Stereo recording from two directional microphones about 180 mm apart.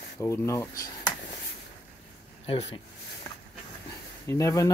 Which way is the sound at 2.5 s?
35° left (ahead or behind).